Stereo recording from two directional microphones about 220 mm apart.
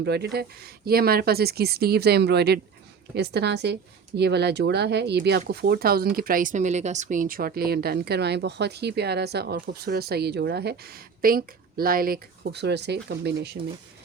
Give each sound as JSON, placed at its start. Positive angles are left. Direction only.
{"t": 0.0, "sound": "speech", "side_deg": -50}